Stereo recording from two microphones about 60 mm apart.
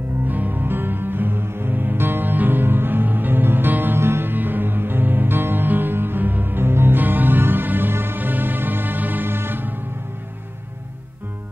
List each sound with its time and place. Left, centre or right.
0.3 s music: right